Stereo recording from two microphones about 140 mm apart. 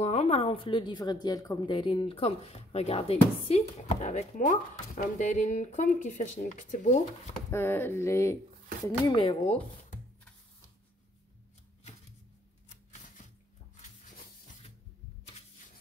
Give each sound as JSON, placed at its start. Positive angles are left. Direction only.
{"t": 0.0, "sound": "a woman's voice", "side_deg": 45}
{"t": 7.5, "sound": "speech", "side_deg": 15}
{"t": 9.1, "sound": "speech", "side_deg": 40}